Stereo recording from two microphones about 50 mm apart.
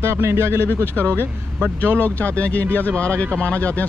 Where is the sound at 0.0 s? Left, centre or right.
Right.